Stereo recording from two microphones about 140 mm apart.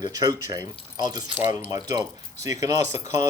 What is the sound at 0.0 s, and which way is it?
Speech, 25° right (ahead or behind).